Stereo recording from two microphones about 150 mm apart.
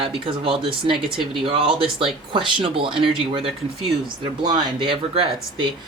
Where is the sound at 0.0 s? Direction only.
35° right (ahead or behind).